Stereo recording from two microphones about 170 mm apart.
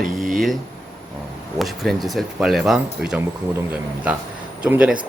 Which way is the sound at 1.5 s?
Centre (ahead or behind).